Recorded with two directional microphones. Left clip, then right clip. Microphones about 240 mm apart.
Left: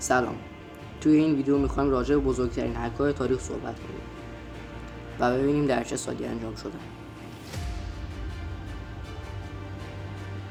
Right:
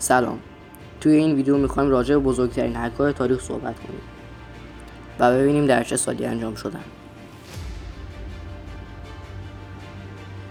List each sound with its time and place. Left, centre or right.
0.0 s speech: right
5.2 s speech: right